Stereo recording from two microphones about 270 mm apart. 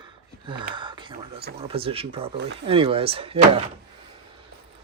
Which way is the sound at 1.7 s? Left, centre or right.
Right.